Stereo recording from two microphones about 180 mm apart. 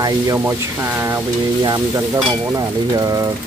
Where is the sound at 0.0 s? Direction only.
15° right (ahead or behind).